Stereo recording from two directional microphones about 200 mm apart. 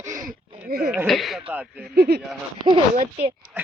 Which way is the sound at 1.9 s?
50° right (ahead or behind).